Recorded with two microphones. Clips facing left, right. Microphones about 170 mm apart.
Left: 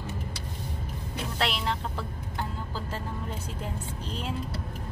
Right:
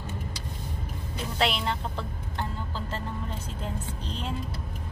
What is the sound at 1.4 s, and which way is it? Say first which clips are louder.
Music: right 3 dB; centre (ahead or behind).